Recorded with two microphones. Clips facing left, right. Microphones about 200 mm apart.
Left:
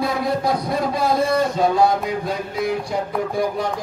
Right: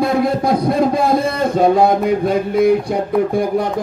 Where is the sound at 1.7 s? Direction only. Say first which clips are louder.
Right 4 dB; 55° right (ahead or behind).